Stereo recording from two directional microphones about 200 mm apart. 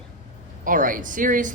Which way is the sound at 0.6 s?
45° right (ahead or behind).